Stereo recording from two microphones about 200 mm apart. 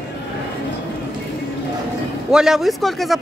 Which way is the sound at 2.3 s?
Centre (ahead or behind).